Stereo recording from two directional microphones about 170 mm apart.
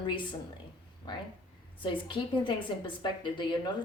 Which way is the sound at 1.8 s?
30° left (ahead or behind).